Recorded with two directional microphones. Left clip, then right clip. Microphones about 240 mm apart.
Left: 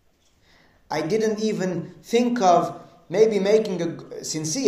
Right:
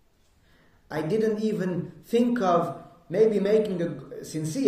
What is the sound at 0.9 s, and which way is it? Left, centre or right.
Speech, centre.